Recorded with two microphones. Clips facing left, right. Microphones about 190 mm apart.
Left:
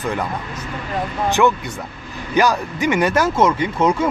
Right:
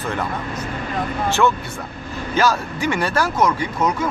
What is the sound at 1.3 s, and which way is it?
Speech, 15° left (ahead or behind).